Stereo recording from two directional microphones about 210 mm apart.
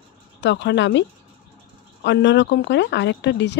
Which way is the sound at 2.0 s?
55° left (ahead or behind).